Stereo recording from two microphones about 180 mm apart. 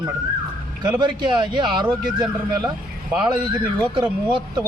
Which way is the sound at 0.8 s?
25° right (ahead or behind).